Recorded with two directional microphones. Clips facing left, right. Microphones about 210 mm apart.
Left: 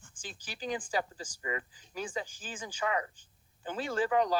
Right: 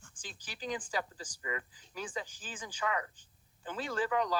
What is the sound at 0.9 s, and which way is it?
Speech, 25° left (ahead or behind).